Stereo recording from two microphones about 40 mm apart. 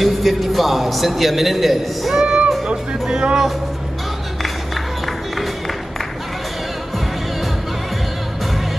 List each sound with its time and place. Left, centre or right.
0.0 s a man's voice: centre
2.2 s music: right
2.6 s speech: centre
5.0 s music: centre